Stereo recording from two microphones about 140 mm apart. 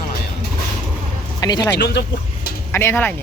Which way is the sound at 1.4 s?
30° left (ahead or behind).